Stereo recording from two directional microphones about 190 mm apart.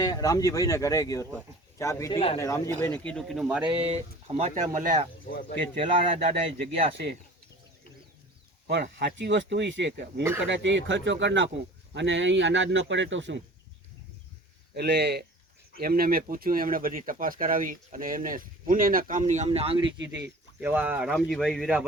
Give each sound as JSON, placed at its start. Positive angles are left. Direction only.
{"t": 0.0, "sound": "speech", "side_deg": 20}
{"t": 2.1, "sound": "speech", "side_deg": 30}
{"t": 2.4, "sound": "speech", "side_deg": 15}
{"t": 3.8, "sound": "speech", "side_deg": -35}
{"t": 5.2, "sound": "speech", "side_deg": 50}
{"t": 5.8, "sound": "speech", "side_deg": -30}
{"t": 8.6, "sound": "speech", "side_deg": -65}
{"t": 14.8, "sound": "speech", "side_deg": -60}
{"t": 20.6, "sound": "speech", "side_deg": -10}